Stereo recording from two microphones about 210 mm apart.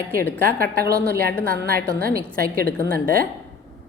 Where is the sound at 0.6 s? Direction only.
45° right (ahead or behind).